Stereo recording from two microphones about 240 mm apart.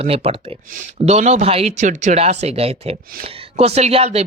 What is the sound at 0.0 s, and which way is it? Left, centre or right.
Speech, right.